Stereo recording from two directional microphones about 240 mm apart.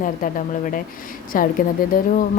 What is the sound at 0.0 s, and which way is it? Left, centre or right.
A woman's voice, left.